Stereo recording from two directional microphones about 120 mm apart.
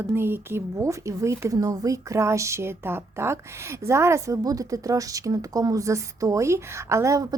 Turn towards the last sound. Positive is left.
turn(degrees=-30)  # may be behind; listen again after turning